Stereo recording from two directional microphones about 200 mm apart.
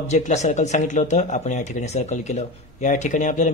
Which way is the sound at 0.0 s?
35° left (ahead or behind).